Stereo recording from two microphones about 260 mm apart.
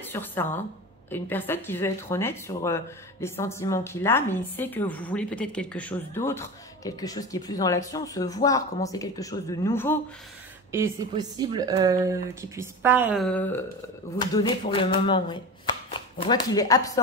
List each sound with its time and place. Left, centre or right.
0.0 s a woman's voice: centre
10.7 s speech: centre